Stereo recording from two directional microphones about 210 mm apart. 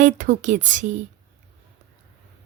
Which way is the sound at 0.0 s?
35° right (ahead or behind).